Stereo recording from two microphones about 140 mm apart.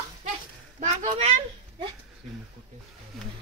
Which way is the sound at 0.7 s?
55° right (ahead or behind).